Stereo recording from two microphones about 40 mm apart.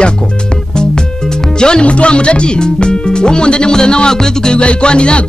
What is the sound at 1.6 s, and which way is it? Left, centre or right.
Speech, left.